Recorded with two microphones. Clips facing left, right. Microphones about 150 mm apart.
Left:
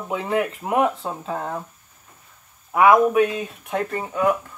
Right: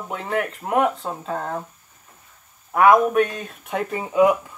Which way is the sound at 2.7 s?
5° left (ahead or behind).